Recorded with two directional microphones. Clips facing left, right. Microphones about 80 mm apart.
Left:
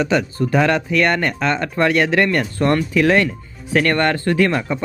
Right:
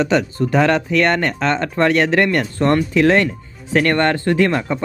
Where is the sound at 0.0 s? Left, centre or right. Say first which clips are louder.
Right 1 dB; right.